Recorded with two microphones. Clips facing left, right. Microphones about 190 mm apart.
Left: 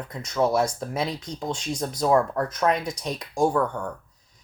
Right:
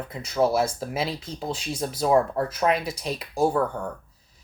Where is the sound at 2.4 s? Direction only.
30° right (ahead or behind).